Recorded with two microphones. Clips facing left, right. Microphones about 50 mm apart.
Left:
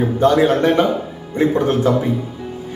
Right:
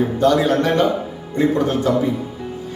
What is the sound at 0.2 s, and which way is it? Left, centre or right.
A man's voice, left.